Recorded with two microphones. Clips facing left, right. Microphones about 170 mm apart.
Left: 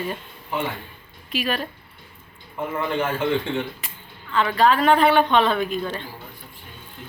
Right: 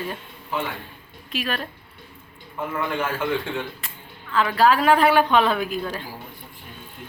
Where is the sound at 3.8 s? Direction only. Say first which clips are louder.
Even; centre (ahead or behind).